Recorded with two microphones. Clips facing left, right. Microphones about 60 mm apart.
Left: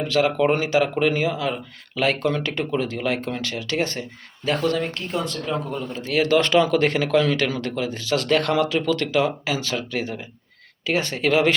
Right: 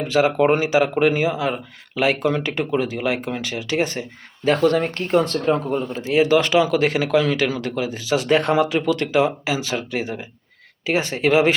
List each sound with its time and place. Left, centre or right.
0.0 s speech: centre
4.4 s speech: right
5.5 s speech: right
6.1 s speech: centre